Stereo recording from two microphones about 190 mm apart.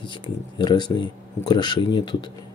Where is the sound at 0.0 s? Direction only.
25° left (ahead or behind).